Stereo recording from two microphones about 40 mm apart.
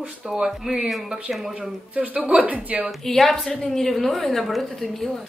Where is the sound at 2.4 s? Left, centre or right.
Right.